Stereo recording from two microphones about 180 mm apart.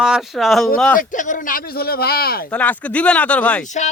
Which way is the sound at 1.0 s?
45° left (ahead or behind).